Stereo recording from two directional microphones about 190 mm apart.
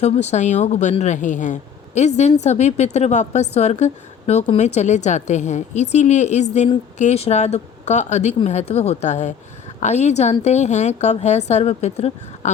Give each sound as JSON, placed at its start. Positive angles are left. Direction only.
{"t": 0.0, "sound": "a woman's voice", "side_deg": 35}